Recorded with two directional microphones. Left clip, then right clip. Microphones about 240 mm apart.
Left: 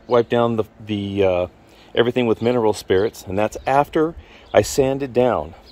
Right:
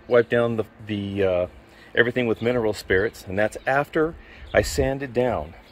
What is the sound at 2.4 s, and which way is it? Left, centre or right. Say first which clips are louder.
Speech: left 5 dB; left.